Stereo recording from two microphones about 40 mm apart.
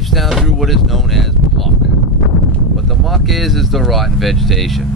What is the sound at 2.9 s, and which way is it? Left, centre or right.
Speech, centre.